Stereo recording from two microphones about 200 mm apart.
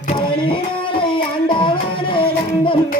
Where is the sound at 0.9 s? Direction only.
25° left (ahead or behind).